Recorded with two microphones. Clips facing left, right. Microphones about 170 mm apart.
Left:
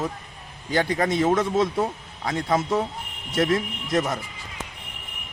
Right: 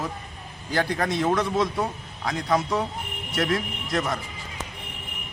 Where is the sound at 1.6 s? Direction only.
25° left (ahead or behind).